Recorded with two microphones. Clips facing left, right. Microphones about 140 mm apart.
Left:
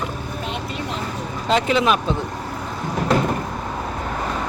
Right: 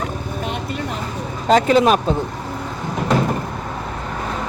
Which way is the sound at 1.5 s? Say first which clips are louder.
Right 5 dB; 40° right (ahead or behind).